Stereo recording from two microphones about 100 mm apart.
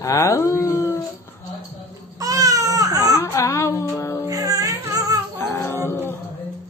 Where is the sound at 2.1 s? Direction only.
35° right (ahead or behind).